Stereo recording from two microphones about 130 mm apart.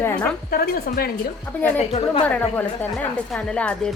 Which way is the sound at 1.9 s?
50° left (ahead or behind).